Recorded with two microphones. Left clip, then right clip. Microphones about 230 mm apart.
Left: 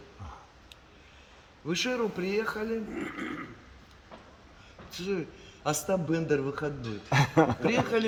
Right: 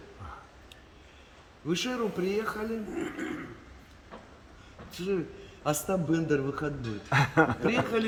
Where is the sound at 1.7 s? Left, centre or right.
Centre.